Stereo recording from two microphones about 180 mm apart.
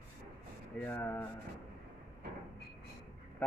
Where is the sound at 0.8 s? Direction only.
10° left (ahead or behind).